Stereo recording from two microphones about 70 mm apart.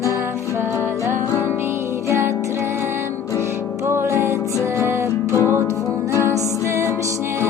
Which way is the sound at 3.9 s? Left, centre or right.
Right.